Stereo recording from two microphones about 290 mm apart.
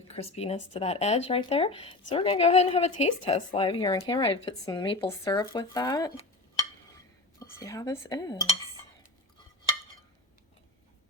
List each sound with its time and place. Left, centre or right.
0.1 s speech: left
7.3 s speech: centre